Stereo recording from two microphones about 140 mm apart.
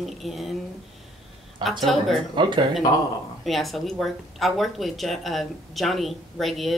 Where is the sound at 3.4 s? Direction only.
Centre (ahead or behind).